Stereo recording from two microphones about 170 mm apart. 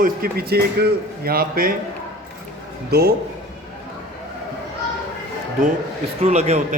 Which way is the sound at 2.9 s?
65° right (ahead or behind).